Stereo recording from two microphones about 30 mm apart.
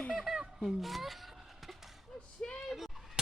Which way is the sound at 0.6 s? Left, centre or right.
Centre.